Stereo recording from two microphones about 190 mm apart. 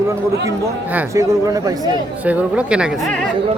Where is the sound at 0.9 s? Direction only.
15° right (ahead or behind).